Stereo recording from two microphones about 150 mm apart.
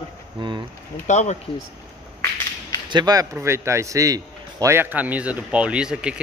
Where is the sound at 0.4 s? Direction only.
30° right (ahead or behind).